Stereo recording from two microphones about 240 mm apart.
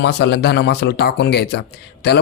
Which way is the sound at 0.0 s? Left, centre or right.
Left.